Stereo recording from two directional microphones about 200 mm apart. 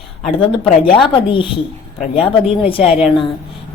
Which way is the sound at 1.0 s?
25° left (ahead or behind).